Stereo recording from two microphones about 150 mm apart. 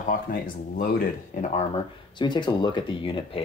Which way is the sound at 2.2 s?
30° left (ahead or behind).